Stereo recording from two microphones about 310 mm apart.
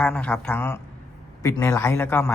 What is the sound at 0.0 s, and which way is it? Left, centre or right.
Speech, centre.